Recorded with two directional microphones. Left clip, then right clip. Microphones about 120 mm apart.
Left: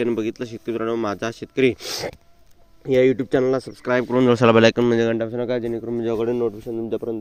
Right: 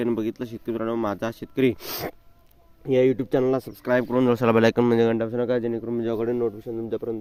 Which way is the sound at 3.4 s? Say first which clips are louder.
Left 3 dB; 10° left (ahead or behind).